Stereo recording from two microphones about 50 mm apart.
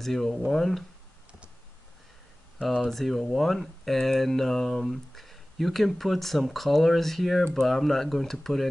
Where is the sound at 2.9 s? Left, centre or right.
Centre.